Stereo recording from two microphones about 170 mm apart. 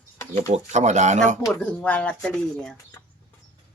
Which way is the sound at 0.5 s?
45° right (ahead or behind).